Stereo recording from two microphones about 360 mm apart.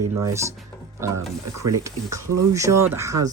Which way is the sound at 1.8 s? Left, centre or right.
Centre.